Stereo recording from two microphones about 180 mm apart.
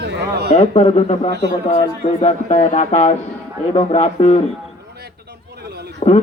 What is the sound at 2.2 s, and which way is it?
A man's voice, 40° left (ahead or behind).